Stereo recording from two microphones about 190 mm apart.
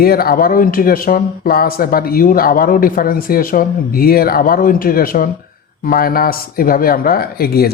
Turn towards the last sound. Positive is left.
turn(degrees=55)  # may be behind; listen again after turning